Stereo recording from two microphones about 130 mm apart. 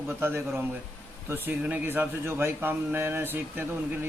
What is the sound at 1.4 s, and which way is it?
Speech, 10° right (ahead or behind).